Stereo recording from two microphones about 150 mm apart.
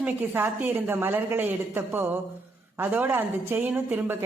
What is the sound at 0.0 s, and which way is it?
A woman's voice, 15° right (ahead or behind).